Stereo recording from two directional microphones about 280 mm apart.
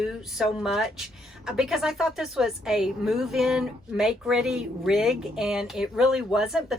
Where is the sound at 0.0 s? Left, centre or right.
Centre.